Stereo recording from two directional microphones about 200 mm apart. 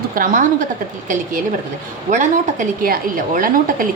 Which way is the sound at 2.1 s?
40° right (ahead or behind).